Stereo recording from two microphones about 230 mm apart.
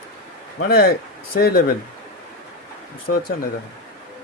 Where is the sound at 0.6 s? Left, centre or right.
Left.